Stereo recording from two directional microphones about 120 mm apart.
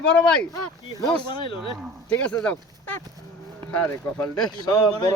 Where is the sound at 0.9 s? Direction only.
40° left (ahead or behind).